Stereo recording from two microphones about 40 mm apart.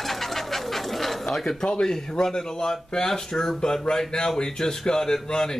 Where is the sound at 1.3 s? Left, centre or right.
Centre.